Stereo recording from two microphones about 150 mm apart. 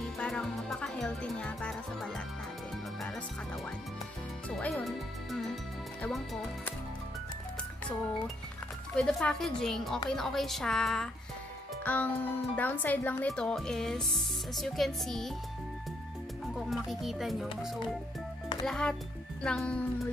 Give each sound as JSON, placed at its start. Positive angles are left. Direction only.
{"t": 0.2, "sound": "music", "side_deg": 0}
{"t": 4.5, "sound": "speech", "side_deg": 5}
{"t": 8.9, "sound": "speech", "side_deg": 5}
{"t": 11.8, "sound": "music", "side_deg": 10}
{"t": 12.5, "sound": "speech", "side_deg": 10}
{"t": 16.5, "sound": "a child's voice", "side_deg": 0}